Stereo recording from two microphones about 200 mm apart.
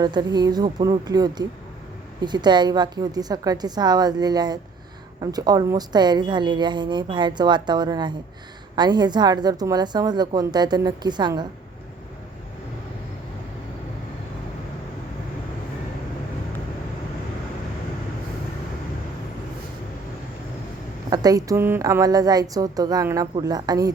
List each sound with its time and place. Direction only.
0.0 s a woman's voice: 20° right (ahead or behind)
21.1 s a woman's voice: 20° right (ahead or behind)